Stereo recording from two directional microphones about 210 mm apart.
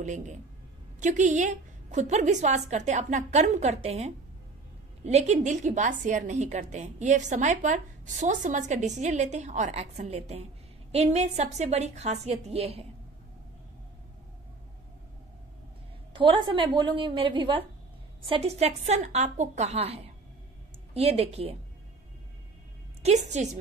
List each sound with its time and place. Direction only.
0.0 s a woman's voice: 35° right (ahead or behind)
16.1 s a woman's voice: 25° right (ahead or behind)
23.0 s a woman's voice: 35° right (ahead or behind)